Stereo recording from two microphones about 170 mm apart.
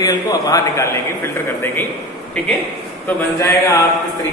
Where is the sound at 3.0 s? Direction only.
15° left (ahead or behind).